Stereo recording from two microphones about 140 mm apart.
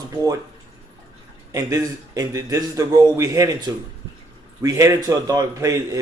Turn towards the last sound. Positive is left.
turn(degrees=-25)  # may be behind; listen again after turning